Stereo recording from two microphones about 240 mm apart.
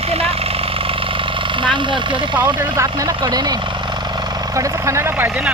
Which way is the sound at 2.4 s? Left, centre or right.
Centre.